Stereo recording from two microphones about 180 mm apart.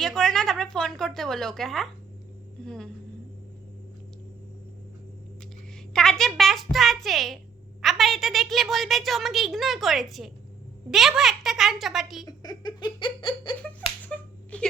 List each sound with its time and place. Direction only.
0.0 s a woman's voice: centre (ahead or behind)
5.9 s a woman's voice: centre (ahead or behind)
12.2 s speech: 20° left (ahead or behind)
14.1 s a sound: 5° left (ahead or behind)